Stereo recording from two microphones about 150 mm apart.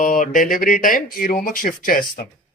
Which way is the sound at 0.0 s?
60° left (ahead or behind).